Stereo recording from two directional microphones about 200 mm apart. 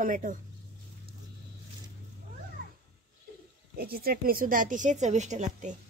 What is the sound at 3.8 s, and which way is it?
Speech, 50° right (ahead or behind).